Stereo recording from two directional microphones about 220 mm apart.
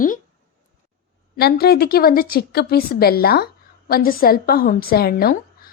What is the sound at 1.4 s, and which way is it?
A woman's voice, 45° left (ahead or behind).